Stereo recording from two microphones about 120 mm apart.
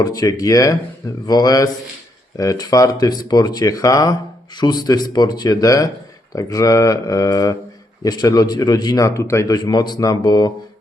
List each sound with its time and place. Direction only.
0.0 s speech: 30° left (ahead or behind)